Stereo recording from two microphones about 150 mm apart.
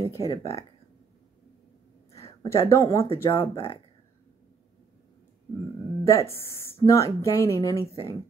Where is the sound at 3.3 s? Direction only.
35° left (ahead or behind).